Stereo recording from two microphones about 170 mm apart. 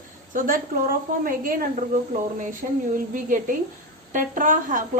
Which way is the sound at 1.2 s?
55° right (ahead or behind).